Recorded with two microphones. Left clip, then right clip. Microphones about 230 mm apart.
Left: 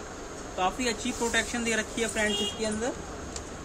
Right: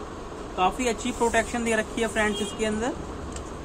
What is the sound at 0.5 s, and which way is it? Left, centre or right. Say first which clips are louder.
Speech: right 4 dB; centre.